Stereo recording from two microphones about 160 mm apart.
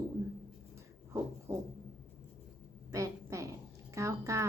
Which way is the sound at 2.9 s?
20° right (ahead or behind).